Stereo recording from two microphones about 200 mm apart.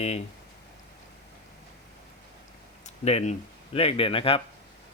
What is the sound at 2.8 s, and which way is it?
Speech, 35° left (ahead or behind).